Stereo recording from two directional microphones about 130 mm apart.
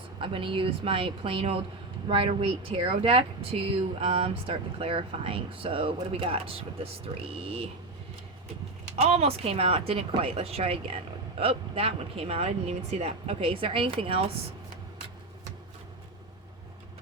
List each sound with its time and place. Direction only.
0.2 s speech: 40° right (ahead or behind)
9.0 s speech: 55° right (ahead or behind)